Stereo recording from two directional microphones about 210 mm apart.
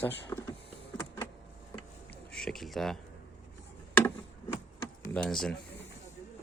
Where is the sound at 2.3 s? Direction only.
Centre (ahead or behind).